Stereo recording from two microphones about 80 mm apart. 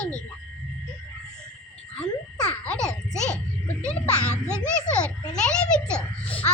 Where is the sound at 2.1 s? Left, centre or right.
Left.